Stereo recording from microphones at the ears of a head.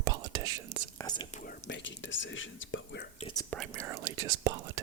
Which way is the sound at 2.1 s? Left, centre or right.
Left.